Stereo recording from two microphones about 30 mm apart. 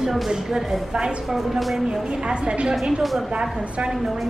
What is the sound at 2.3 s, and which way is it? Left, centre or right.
Speech, right.